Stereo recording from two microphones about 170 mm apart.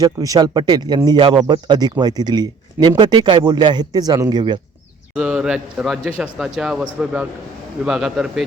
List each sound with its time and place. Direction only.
0.0 s speech: 20° right (ahead or behind)
5.1 s a man's voice: 5° right (ahead or behind)